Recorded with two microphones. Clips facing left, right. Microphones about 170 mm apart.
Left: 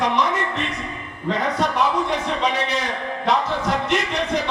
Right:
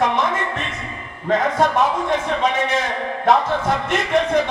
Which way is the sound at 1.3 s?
45° right (ahead or behind).